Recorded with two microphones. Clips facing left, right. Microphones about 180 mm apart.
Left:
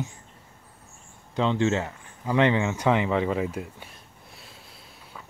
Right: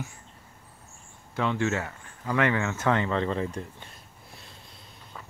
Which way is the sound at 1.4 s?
20° left (ahead or behind).